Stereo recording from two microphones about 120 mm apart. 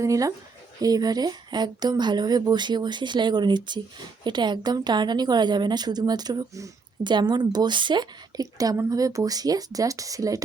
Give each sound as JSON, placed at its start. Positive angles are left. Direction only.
{"t": 0.0, "sound": "a woman's voice", "side_deg": -30}